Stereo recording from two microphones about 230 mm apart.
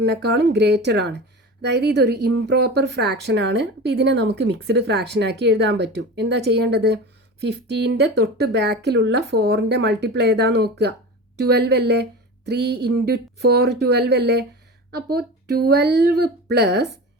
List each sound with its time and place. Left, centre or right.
0.0 s speech: right